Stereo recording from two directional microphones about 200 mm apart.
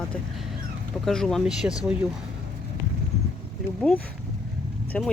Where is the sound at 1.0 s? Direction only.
5° left (ahead or behind).